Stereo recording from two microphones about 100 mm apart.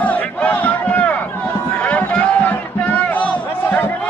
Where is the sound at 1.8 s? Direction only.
15° left (ahead or behind).